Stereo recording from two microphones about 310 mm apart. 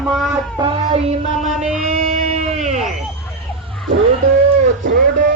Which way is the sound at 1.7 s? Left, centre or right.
Right.